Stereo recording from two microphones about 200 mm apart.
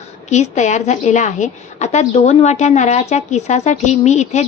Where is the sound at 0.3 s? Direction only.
35° left (ahead or behind).